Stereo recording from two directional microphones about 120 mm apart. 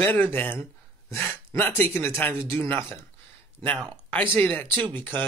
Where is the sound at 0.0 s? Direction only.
15° left (ahead or behind).